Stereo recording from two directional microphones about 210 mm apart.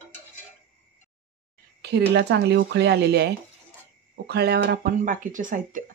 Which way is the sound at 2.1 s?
55° right (ahead or behind).